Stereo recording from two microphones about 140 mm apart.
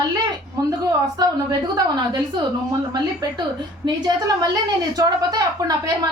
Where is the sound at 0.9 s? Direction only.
30° right (ahead or behind).